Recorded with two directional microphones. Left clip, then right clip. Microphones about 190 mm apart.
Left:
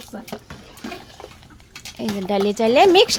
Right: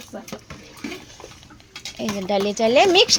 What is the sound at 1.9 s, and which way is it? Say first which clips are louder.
Speech: left 1 dB; 15° left (ahead or behind).